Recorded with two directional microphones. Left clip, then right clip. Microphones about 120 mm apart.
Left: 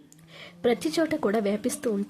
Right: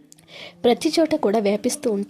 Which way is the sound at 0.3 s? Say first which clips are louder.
Right 6 dB; 40° right (ahead or behind).